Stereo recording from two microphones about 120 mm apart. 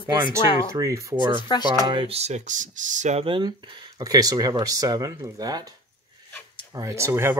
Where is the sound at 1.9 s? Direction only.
45° right (ahead or behind).